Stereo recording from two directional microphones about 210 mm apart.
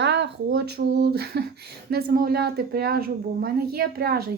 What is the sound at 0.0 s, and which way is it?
A child's voice, 55° right (ahead or behind).